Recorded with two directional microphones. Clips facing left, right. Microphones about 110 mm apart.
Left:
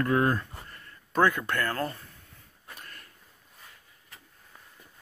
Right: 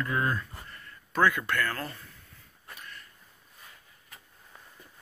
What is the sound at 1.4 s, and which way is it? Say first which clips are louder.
Speech: even; 15° left (ahead or behind).